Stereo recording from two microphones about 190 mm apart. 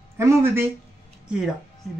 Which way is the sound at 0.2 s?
15° right (ahead or behind).